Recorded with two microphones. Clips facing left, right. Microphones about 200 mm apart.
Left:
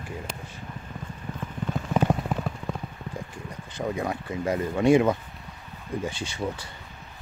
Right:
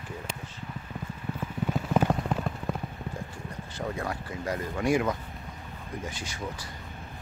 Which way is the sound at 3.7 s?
20° left (ahead or behind).